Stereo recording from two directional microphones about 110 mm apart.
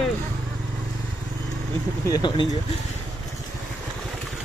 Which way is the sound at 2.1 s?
40° left (ahead or behind).